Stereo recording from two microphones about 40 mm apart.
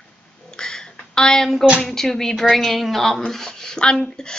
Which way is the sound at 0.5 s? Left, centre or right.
Centre.